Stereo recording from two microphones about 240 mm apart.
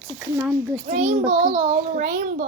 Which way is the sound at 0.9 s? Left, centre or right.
Right.